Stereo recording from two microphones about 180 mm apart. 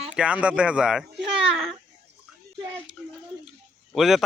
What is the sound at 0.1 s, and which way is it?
A child's voice, 5° right (ahead or behind).